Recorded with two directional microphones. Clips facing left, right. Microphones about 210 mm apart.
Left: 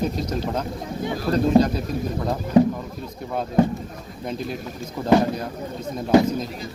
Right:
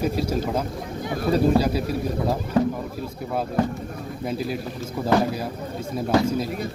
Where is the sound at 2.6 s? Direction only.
20° left (ahead or behind).